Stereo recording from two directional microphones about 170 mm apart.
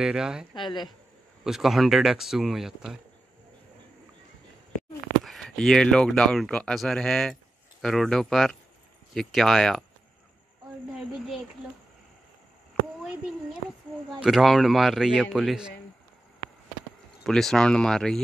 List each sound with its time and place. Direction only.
0.0 s speech: 5° right (ahead or behind)
0.6 s speech: 25° left (ahead or behind)
1.4 s speech: centre (ahead or behind)
5.2 s speech: centre (ahead or behind)
11.1 s speech: centre (ahead or behind)
13.0 s speech: 5° right (ahead or behind)
17.2 s speech: centre (ahead or behind)